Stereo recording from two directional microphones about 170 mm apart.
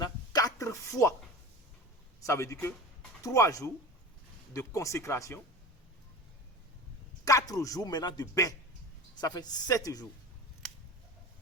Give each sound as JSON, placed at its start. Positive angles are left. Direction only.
{"t": 0.0, "sound": "a sound", "side_deg": 20}
{"t": 2.2, "sound": "speech", "side_deg": 15}
{"t": 7.3, "sound": "speech", "side_deg": 20}